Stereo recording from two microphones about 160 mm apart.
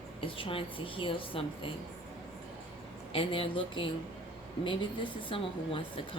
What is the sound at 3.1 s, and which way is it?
A woman's voice, 35° left (ahead or behind).